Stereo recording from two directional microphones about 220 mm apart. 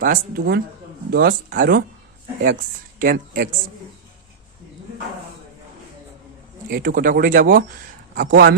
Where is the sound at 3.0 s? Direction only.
35° right (ahead or behind).